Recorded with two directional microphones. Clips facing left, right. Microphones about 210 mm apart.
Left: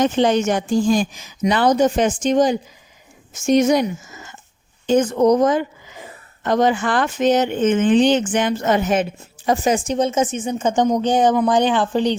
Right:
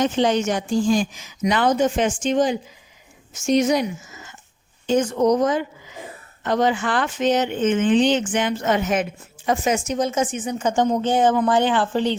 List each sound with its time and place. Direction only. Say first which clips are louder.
0.0 s speech: left 3 dB; 50° left (ahead or behind); by 12.1 s 15° left (ahead or behind)